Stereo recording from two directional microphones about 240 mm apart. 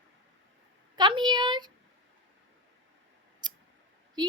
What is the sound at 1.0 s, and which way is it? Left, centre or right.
Speech, centre.